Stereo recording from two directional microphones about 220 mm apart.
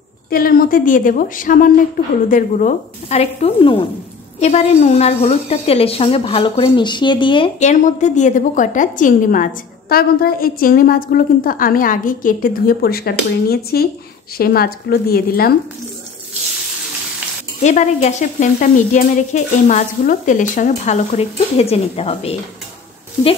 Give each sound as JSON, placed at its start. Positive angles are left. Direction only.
{"t": 0.3, "sound": "a woman's voice", "side_deg": 40}
{"t": 17.6, "sound": "a woman's voice", "side_deg": 30}